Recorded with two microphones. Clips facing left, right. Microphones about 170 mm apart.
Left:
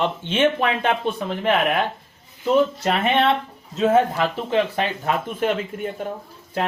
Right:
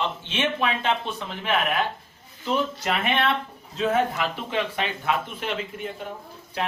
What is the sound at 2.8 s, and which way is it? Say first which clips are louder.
Speech: left 5 dB; 30° left (ahead or behind).